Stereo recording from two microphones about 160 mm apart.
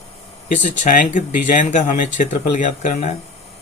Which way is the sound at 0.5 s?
55° left (ahead or behind).